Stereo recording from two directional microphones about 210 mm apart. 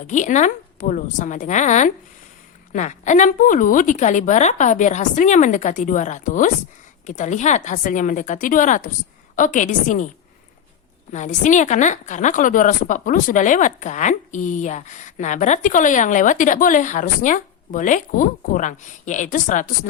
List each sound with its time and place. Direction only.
0.1 s a woman's voice: 35° left (ahead or behind)
11.1 s a woman's voice: 35° left (ahead or behind)